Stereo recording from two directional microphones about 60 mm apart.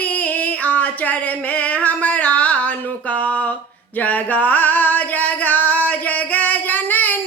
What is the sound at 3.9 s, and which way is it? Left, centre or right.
Singing, left.